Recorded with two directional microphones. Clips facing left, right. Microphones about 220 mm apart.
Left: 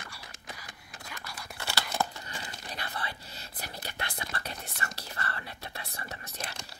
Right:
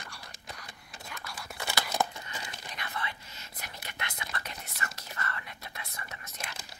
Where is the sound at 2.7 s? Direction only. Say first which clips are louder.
Left 1 dB; 35° left (ahead or behind).